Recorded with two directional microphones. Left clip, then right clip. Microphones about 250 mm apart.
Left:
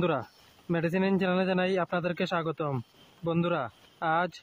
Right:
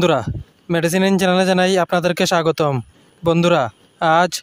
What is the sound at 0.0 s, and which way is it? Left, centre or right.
Speech, right.